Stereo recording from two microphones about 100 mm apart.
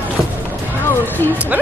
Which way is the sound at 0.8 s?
20° left (ahead or behind).